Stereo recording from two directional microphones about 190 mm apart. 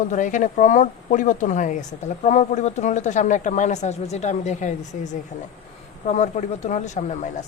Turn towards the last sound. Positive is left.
turn(degrees=40)  # may be behind; listen again after turning